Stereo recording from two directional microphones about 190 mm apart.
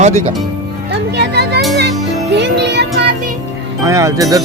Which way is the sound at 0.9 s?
60° right (ahead or behind).